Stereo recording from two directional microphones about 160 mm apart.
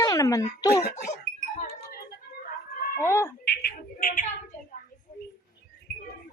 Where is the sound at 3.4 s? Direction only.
80° left.